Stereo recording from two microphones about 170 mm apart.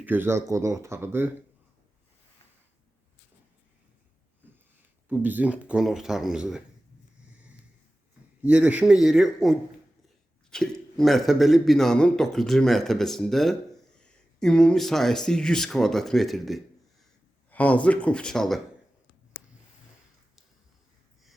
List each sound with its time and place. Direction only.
0.0 s speech: 10° right (ahead or behind)
5.0 s speech: 10° right (ahead or behind)
8.4 s speech: 10° right (ahead or behind)